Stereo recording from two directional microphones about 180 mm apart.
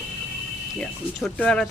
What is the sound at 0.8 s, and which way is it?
Speech, 5° left (ahead or behind).